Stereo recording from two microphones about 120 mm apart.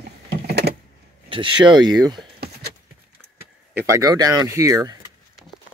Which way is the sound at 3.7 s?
25° right (ahead or behind).